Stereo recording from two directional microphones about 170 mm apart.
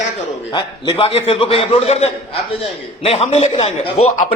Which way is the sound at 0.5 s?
30° left (ahead or behind).